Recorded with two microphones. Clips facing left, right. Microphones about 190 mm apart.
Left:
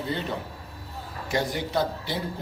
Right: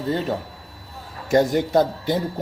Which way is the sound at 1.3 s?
45° right (ahead or behind).